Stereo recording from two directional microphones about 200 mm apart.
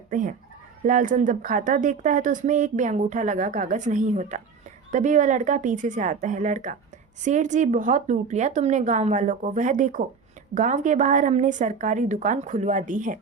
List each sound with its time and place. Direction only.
0.1 s speech: 40° right (ahead or behind)